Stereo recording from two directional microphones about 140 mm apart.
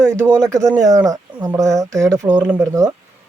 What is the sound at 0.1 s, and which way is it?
Speech, 20° right (ahead or behind).